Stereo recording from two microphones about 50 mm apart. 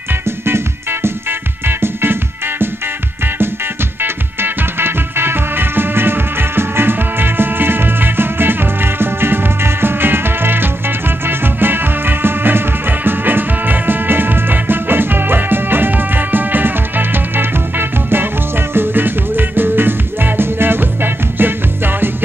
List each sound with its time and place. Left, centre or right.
1.7 s music: right
4.0 s music: right